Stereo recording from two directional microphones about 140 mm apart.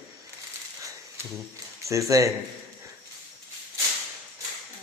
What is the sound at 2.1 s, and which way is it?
Speech, 25° right (ahead or behind).